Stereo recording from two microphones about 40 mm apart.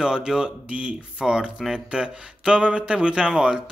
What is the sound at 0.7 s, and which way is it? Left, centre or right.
Mantra, right.